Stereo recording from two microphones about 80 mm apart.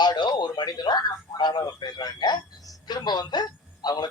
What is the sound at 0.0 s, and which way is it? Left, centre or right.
Speech, left.